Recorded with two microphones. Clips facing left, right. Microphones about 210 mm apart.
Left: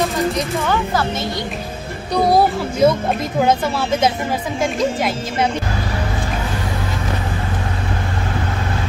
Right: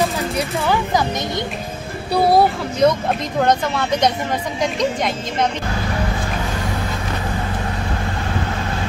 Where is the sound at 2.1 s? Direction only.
5° right (ahead or behind).